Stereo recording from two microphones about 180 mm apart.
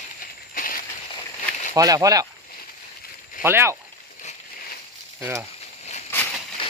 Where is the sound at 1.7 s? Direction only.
20° right (ahead or behind).